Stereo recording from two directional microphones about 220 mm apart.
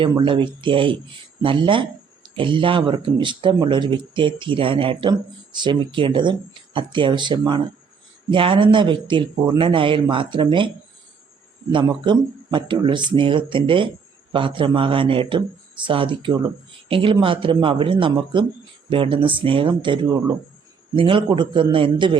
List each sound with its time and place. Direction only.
0.0 s speech: 20° right (ahead or behind)
11.7 s speech: 20° right (ahead or behind)